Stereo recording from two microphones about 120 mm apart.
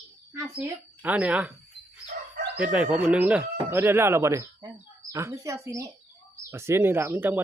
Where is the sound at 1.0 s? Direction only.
10° right (ahead or behind).